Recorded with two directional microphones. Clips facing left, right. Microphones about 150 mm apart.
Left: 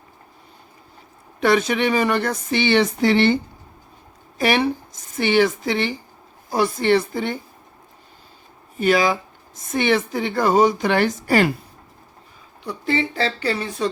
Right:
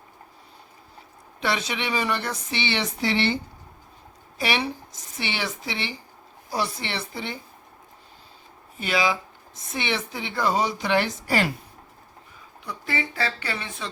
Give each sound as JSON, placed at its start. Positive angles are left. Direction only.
{"t": 1.4, "sound": "speech", "side_deg": 50}
{"t": 4.4, "sound": "speech", "side_deg": 50}
{"t": 8.8, "sound": "speech", "side_deg": 45}
{"t": 12.6, "sound": "speech", "side_deg": 30}